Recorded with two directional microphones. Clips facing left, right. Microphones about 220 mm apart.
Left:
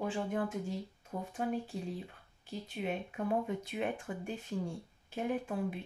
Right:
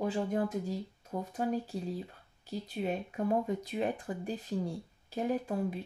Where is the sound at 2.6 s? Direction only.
40° right (ahead or behind).